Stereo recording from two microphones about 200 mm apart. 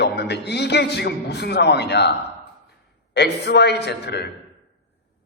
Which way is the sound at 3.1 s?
55° left (ahead or behind).